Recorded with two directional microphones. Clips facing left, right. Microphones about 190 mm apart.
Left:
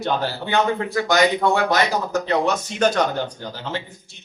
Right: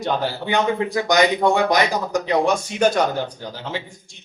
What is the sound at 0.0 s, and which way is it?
A man's voice, 15° right (ahead or behind).